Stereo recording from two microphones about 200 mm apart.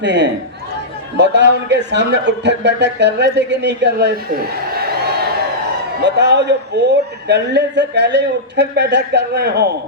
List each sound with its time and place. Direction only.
0.0 s speech: 60° right (ahead or behind)
4.7 s a sound: 50° right (ahead or behind)
6.0 s speech: 60° right (ahead or behind)